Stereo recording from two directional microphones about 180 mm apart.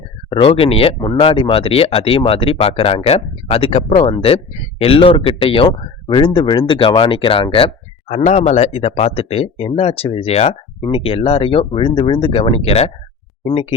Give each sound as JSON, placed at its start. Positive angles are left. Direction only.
{"t": 0.3, "sound": "speech", "side_deg": 30}
{"t": 8.1, "sound": "speech", "side_deg": 40}